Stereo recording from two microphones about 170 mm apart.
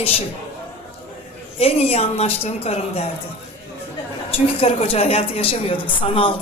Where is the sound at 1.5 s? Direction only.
35° left (ahead or behind).